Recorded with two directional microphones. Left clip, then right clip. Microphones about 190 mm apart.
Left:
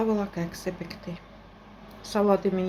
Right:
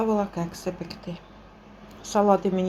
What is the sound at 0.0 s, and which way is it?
Speech, 10° right (ahead or behind).